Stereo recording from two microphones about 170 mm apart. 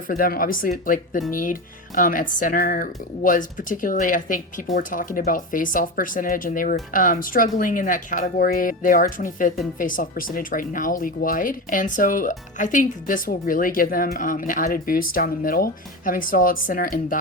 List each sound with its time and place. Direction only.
0.2 s speech: 55° left (ahead or behind)